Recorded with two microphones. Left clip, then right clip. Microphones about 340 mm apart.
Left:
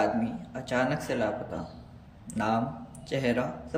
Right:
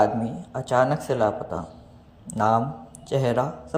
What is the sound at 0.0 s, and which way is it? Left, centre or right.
A man's voice, centre.